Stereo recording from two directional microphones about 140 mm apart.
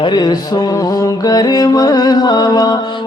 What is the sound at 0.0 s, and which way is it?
Music, 30° left (ahead or behind).